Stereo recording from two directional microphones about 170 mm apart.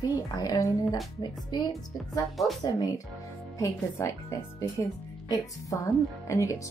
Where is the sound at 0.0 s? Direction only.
20° left (ahead or behind).